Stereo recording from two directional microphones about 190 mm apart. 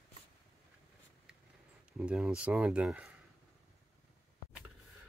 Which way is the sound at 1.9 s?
5° right (ahead or behind).